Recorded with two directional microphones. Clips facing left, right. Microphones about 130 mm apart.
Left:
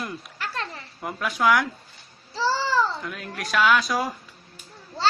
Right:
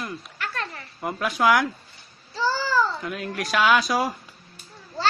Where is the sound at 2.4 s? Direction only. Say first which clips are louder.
Even; 30° left (ahead or behind).